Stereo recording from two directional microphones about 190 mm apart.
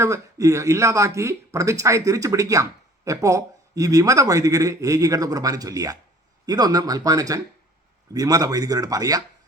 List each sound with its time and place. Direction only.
0.0 s speech: 15° right (ahead or behind)